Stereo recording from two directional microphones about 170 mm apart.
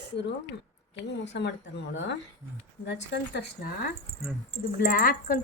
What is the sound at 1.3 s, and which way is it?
Speech, 90° left.